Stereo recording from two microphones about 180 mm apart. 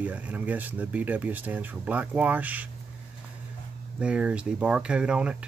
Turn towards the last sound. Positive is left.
turn(degrees=-5)  # may be behind; listen again after turning